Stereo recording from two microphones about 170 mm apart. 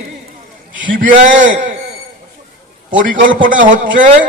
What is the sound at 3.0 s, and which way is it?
A man's voice, 50° right (ahead or behind).